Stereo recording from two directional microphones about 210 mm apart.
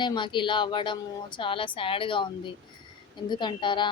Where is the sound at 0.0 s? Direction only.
20° left (ahead or behind).